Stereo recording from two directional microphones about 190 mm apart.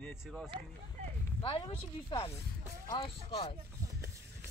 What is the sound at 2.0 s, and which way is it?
A woman's voice, 30° left (ahead or behind).